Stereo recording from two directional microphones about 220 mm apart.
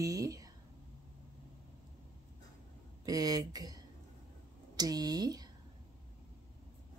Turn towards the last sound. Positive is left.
turn(degrees=-20)  # may be behind; listen again after turning